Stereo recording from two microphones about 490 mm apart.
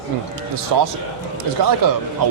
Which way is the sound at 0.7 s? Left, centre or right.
Right.